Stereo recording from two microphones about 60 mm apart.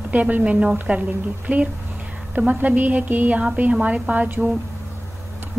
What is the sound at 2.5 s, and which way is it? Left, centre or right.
A woman's voice, right.